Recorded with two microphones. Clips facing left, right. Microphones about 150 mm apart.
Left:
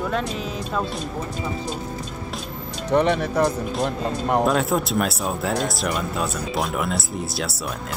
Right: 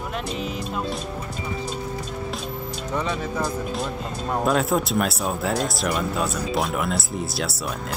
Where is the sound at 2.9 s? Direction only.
65° left (ahead or behind).